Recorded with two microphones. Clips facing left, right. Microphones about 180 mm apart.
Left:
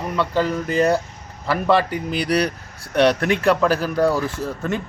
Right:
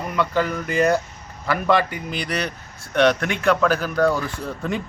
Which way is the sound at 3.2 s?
Centre (ahead or behind).